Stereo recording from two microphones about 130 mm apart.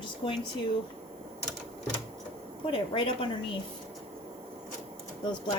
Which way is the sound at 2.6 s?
40° left (ahead or behind).